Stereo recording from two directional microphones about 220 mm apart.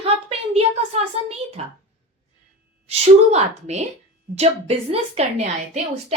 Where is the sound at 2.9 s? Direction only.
30° right (ahead or behind).